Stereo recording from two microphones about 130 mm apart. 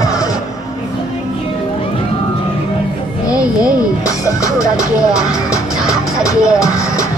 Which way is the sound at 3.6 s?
25° left (ahead or behind).